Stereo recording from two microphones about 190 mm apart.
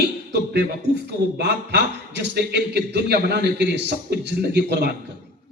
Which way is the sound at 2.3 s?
60° right (ahead or behind).